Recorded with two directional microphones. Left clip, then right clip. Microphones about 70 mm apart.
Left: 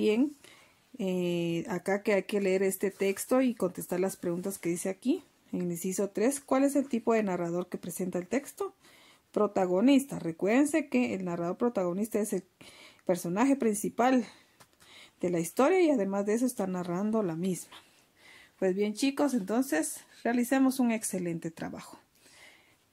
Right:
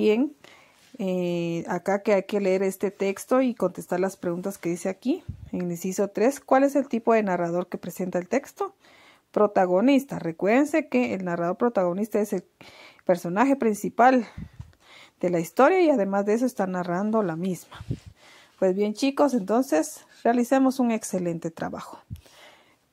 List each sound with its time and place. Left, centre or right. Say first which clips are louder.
0.9 s speech: right 4 dB; right
18.6 s speech: right 6 dB; right